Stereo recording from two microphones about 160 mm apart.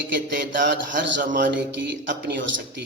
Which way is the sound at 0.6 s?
55° right (ahead or behind).